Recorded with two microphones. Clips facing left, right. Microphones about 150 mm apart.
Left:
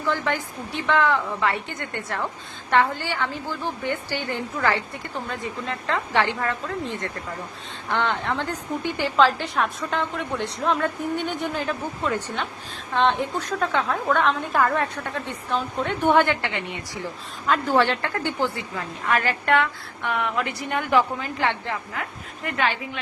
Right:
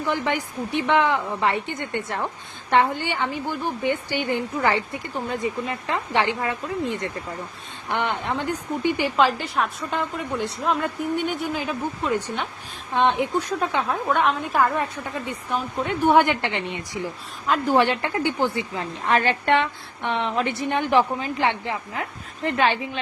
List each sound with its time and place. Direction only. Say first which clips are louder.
0.0 s a woman's voice: right 1 dB; 20° right (ahead or behind)
9.4 s a woman's voice: even; 5° right (ahead or behind)
16.2 s a woman's voice: right 1 dB; 20° right (ahead or behind)
17.4 s a woman's voice: right 1 dB; 5° right (ahead or behind)
17.7 s a woman's voice: right 1 dB; 15° right (ahead or behind)
18.8 s a woman's voice: right 2 dB; 30° right (ahead or behind)